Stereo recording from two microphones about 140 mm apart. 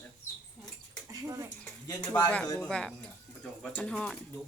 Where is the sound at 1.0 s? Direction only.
20° right (ahead or behind).